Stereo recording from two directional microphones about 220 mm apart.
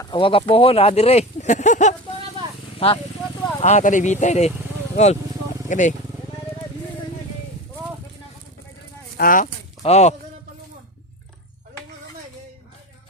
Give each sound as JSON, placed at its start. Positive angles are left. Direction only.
{"t": 0.0, "sound": "speech", "side_deg": 20}
{"t": 5.6, "sound": "speech", "side_deg": 35}
{"t": 9.1, "sound": "speech", "side_deg": 40}